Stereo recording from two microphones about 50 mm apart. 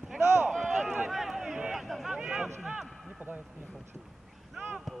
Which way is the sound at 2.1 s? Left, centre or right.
Centre.